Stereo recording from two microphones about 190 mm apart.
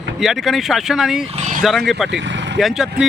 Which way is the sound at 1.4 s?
40° right (ahead or behind).